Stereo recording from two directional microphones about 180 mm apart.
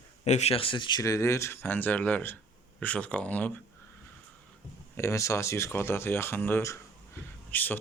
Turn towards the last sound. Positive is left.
turn(degrees=10)  # may be behind; listen again after turning